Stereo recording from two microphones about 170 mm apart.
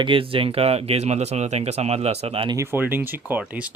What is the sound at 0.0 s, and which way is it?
Speech, 30° right (ahead or behind).